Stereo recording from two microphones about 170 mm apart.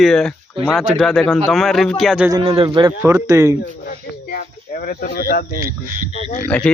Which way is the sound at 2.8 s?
15° right (ahead or behind).